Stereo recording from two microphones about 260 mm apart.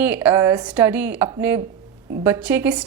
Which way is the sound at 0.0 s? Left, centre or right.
Centre.